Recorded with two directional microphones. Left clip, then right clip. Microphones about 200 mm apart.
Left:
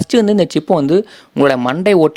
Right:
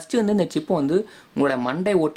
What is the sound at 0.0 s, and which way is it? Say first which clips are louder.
Speech: left 9 dB; 40° left (ahead or behind).